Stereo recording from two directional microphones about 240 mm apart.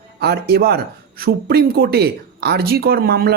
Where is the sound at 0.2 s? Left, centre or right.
Right.